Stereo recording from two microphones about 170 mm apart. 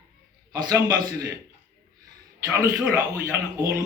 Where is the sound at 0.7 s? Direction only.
20° right (ahead or behind).